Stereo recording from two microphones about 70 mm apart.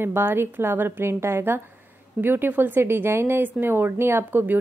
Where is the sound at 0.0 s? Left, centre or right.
Right.